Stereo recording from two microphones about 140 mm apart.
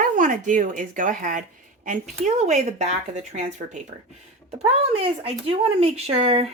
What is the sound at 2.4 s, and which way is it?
Speech, 55° right (ahead or behind).